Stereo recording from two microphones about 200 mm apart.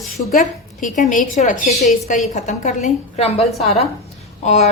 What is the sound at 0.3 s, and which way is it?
A woman's voice, 40° left (ahead or behind).